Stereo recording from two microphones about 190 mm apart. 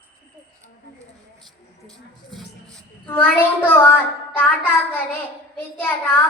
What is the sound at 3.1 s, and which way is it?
A child's voice, 10° left (ahead or behind).